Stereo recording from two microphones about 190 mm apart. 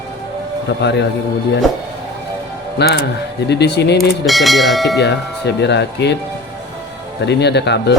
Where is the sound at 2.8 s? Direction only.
60° left (ahead or behind).